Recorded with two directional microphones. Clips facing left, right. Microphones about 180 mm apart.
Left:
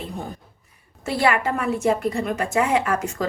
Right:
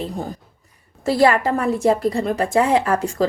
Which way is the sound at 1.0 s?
35° right (ahead or behind).